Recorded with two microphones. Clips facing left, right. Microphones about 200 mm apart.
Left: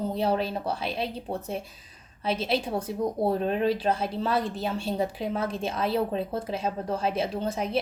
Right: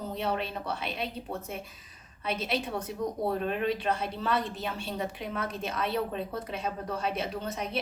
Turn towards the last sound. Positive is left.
turn(degrees=30)  # may be behind; listen again after turning